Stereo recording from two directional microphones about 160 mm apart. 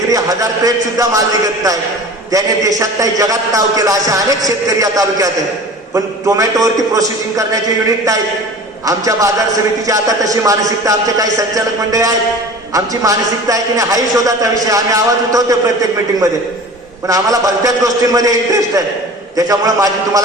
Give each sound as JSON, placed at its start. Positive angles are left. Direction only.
{"t": 0.1, "sound": "a man's voice", "side_deg": -20}
{"t": 17.1, "sound": "a man's voice", "side_deg": -20}